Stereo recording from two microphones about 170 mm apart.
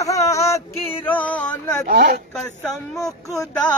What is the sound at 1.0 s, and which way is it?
Speech, 10° left (ahead or behind).